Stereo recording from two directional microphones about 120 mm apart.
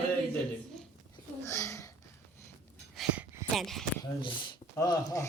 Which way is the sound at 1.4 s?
25° left (ahead or behind).